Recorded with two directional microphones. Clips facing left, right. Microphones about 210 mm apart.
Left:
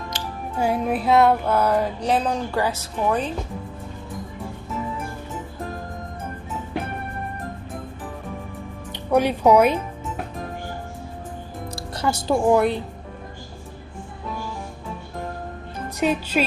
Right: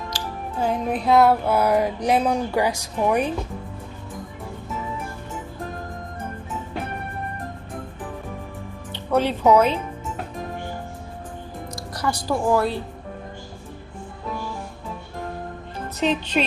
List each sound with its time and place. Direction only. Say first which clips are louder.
0.1 s music: even; 20° left (ahead or behind)
0.6 s a sound: left 1 dB; 5° left (ahead or behind); by 3.3 s 15° right (ahead or behind)
8.9 s speech: left 2 dB; 15° left (ahead or behind)
11.9 s speech: left 3 dB; 25° left (ahead or behind)
16.0 s speech: left 1 dB; 10° left (ahead or behind)